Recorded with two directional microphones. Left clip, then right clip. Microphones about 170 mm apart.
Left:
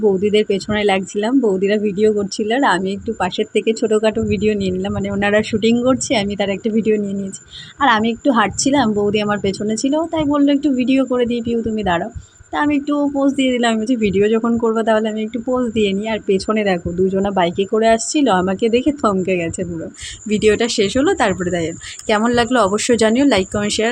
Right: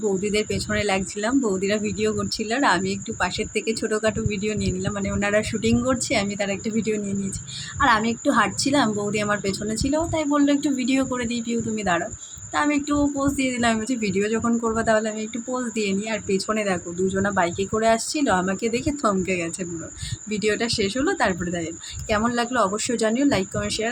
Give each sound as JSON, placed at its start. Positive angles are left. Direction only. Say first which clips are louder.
{"t": 0.2, "sound": "a woman's voice", "louder": "left 9 dB", "side_deg": 40}